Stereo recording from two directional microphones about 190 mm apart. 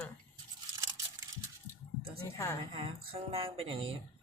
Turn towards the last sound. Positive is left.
turn(degrees=-30)  # may be behind; listen again after turning